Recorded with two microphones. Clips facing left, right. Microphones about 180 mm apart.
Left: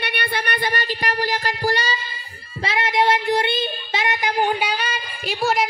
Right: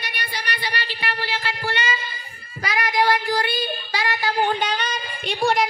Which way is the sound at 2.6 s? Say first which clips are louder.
Left 1 dB; 25° left (ahead or behind).